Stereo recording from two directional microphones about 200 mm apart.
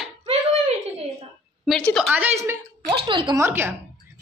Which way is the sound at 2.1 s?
10° right (ahead or behind).